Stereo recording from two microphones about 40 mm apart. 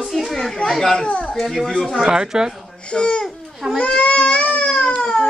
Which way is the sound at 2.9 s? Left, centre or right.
Left.